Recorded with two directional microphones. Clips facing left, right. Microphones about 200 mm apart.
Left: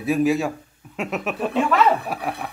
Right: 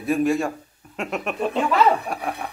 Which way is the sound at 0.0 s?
Centre (ahead or behind).